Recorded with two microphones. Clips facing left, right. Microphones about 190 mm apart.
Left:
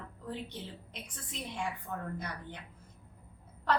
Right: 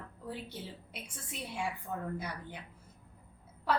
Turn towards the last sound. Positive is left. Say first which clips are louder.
# left 1 dB
turn(degrees=-10)  # may be behind; listen again after turning